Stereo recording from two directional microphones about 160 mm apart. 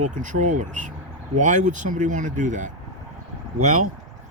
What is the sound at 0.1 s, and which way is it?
Speech, 50° right (ahead or behind).